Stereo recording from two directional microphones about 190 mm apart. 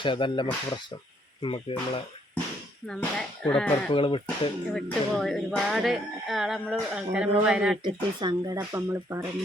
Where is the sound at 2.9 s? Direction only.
5° left (ahead or behind).